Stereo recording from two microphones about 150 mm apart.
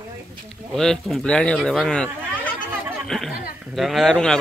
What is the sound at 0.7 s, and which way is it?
Speech, centre (ahead or behind).